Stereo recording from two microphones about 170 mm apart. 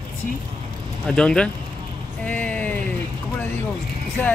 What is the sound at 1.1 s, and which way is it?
Speech, 5° left (ahead or behind).